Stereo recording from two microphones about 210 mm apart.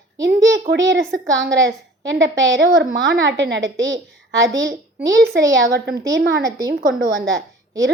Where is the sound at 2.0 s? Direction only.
60° right (ahead or behind).